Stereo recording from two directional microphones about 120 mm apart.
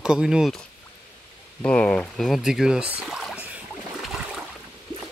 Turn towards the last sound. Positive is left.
turn(degrees=-10)  # may be behind; listen again after turning